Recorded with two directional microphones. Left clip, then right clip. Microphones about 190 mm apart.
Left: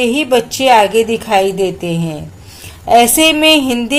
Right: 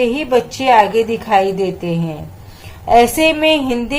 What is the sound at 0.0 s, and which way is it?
A woman's voice, 25° left (ahead or behind).